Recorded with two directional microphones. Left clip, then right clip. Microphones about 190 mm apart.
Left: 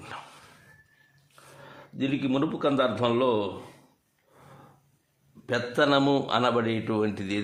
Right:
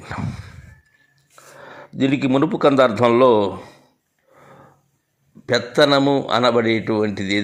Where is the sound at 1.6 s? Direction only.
35° right (ahead or behind).